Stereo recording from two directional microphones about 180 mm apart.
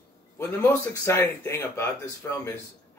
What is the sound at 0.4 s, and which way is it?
Speech, 15° left (ahead or behind).